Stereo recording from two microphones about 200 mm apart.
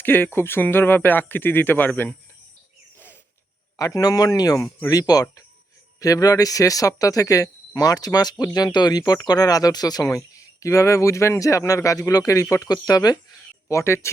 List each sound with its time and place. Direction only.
0.0 s speech: 10° left (ahead or behind)
3.8 s speech: 15° left (ahead or behind)